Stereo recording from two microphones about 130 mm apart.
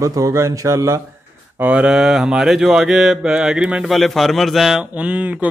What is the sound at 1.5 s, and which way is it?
Mantra, 10° right (ahead or behind).